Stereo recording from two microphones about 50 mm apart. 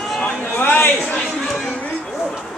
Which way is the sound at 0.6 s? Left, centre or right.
Left.